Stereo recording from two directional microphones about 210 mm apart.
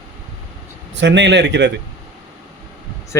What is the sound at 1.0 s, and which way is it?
Speech, 55° right (ahead or behind).